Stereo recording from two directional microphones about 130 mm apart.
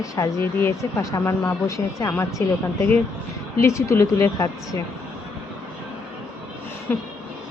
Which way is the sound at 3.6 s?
20° left (ahead or behind).